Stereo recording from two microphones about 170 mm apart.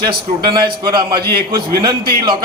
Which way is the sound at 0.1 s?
30° right (ahead or behind).